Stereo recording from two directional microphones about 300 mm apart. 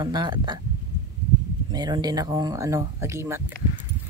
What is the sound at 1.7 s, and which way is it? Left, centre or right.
Speech, centre.